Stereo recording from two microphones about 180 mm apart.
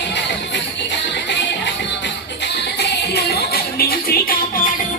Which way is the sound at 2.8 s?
60° left (ahead or behind).